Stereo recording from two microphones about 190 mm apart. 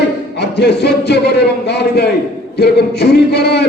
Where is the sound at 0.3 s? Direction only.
60° left (ahead or behind).